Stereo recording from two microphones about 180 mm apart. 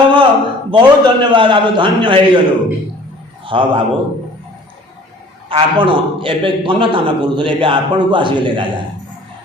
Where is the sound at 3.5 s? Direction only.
30° right (ahead or behind).